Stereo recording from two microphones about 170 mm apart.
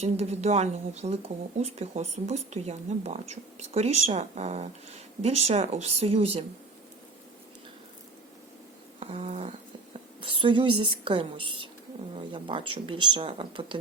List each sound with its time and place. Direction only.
0.0 s speech: 40° right (ahead or behind)
9.0 s a sound: 40° right (ahead or behind)
10.2 s speech: 30° right (ahead or behind)